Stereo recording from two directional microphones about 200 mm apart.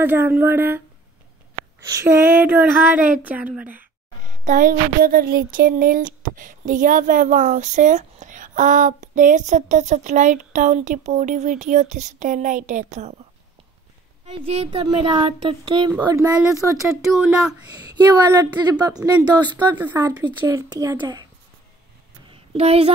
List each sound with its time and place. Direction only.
0.0 s speech: 10° right (ahead or behind)
4.5 s speech: 40° right (ahead or behind)
14.2 s speech: 30° right (ahead or behind); by 17.0 s 15° right (ahead or behind)
17.1 s speech: 5° right (ahead or behind)
17.7 s speech: 20° right (ahead or behind)
22.3 s a sound: 30° right (ahead or behind)